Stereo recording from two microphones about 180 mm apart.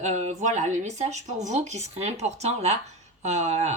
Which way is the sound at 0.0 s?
40° right (ahead or behind).